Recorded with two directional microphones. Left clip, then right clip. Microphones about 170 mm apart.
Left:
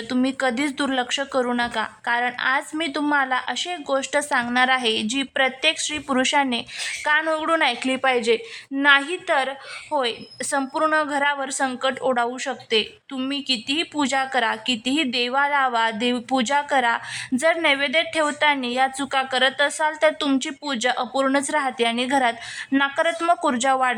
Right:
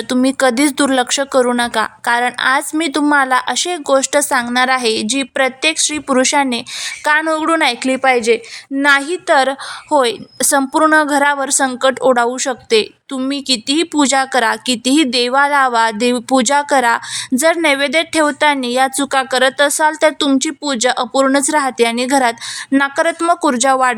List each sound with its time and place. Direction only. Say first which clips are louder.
0.1 s a woman's voice: right 9 dB; 30° right (ahead or behind)
9.3 s a woman's voice: right 10 dB; 35° right (ahead or behind)